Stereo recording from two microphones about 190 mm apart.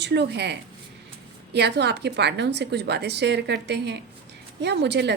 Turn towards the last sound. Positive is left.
turn(degrees=-65)  # may be behind; listen again after turning